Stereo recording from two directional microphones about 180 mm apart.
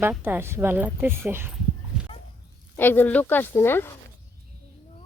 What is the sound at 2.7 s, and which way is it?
Speech, 10° left (ahead or behind).